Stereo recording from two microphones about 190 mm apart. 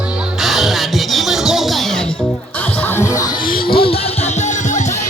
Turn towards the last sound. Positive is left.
turn(degrees=40)  # may be behind; listen again after turning